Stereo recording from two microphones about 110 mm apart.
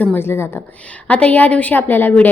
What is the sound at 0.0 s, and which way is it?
A woman's voice, 20° left (ahead or behind).